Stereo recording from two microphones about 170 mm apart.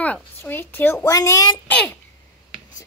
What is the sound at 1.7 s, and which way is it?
Speech, 10° left (ahead or behind).